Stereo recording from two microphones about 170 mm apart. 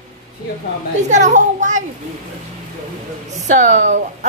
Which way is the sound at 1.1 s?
45° right (ahead or behind).